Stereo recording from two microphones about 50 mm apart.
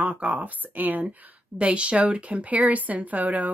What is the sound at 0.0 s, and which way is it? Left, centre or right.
Speech, right.